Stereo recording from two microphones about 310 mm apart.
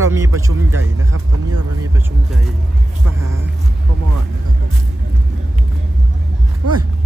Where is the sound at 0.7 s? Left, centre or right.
Right.